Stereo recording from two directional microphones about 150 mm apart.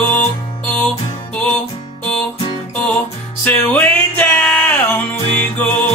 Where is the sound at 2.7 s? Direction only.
10° left (ahead or behind).